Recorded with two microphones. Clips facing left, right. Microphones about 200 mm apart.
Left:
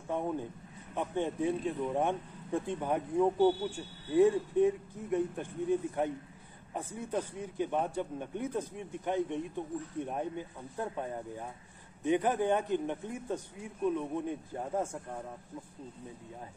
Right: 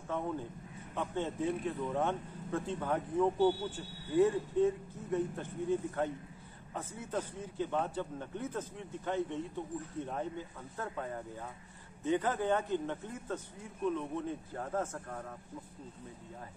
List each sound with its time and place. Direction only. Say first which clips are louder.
0.1 s a man's voice: left 3 dB; 15° left (ahead or behind)